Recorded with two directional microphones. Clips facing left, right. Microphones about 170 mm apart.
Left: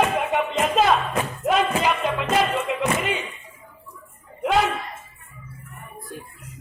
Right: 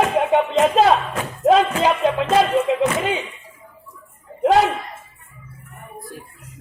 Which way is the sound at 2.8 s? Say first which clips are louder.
Right 4 dB; 30° right (ahead or behind).